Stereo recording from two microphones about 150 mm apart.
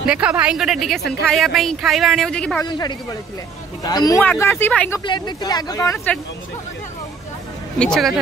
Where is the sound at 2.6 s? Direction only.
30° left (ahead or behind).